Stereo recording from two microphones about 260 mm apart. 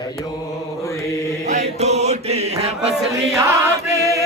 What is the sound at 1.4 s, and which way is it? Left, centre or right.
Chant, right.